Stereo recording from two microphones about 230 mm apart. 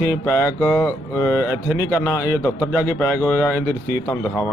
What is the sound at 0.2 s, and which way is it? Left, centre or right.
A man's voice, centre.